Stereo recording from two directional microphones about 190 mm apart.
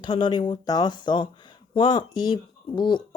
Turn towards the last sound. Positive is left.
turn(degrees=25)  # may be behind; listen again after turning